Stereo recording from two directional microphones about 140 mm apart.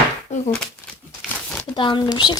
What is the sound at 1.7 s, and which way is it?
Speech, 35° left (ahead or behind).